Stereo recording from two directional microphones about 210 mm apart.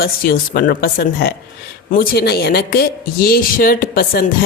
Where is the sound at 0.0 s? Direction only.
45° left (ahead or behind).